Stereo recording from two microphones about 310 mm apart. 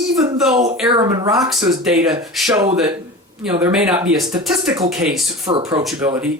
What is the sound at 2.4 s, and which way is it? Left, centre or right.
Speech, centre.